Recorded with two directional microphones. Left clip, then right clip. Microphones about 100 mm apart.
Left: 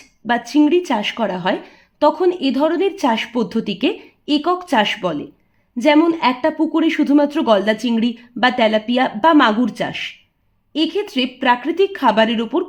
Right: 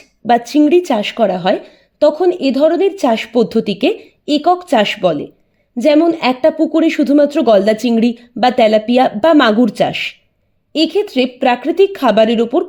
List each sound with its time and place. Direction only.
0.3 s a woman's voice: 50° right (ahead or behind)
11.1 s speech: 40° right (ahead or behind)